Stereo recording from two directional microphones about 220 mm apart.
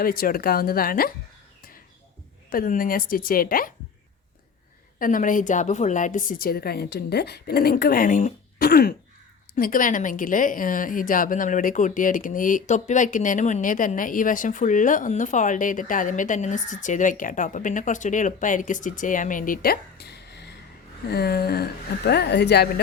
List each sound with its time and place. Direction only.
0.0 s a woman's voice: 40° left (ahead or behind)
2.5 s a woman's voice: 40° left (ahead or behind)
4.9 s a woman's voice: 40° left (ahead or behind)